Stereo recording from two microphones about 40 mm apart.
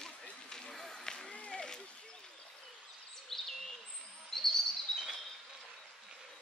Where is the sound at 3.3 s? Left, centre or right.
Centre.